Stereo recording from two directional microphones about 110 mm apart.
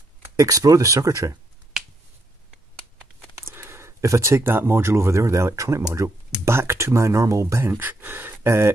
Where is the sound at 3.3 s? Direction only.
20° right (ahead or behind).